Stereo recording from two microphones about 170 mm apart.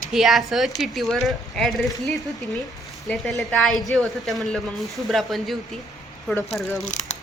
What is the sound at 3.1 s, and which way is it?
Speech, centre (ahead or behind).